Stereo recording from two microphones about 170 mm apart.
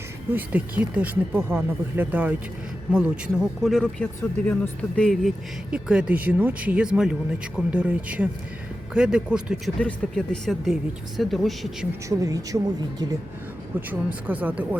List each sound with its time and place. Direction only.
0.3 s speech: 10° right (ahead or behind)
5.7 s speech: 5° right (ahead or behind)
12.0 s a woman's voice: 20° right (ahead or behind)